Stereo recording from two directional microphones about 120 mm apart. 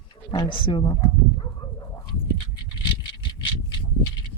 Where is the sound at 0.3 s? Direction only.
40° left (ahead or behind).